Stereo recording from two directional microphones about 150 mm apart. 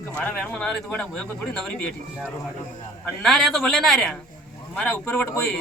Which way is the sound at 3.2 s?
Centre (ahead or behind).